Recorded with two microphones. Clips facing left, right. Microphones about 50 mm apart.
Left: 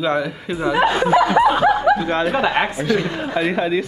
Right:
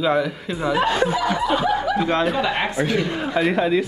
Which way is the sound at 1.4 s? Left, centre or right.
Left.